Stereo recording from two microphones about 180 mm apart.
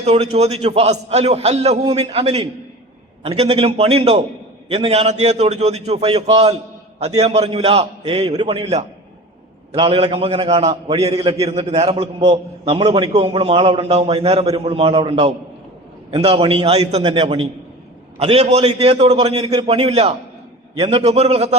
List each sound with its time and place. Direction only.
0.0 s a man's voice: 35° right (ahead or behind)